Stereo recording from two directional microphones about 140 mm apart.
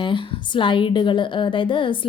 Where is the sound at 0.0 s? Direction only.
35° left (ahead or behind).